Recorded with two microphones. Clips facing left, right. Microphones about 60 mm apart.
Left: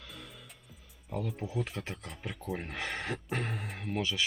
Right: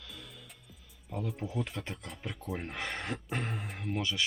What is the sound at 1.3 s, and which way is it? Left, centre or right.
Speech, centre.